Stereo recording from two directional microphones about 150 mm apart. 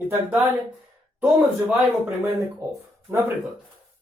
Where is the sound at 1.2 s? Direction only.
15° right (ahead or behind).